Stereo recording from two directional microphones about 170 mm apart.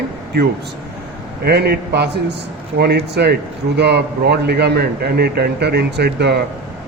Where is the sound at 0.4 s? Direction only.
75° right (ahead or behind).